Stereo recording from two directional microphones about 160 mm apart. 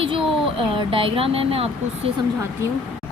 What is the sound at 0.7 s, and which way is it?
Speech, 35° right (ahead or behind).